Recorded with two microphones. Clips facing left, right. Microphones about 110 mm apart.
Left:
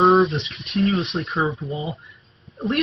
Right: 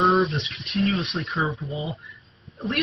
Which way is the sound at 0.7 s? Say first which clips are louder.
Left 3 dB; 30° left (ahead or behind).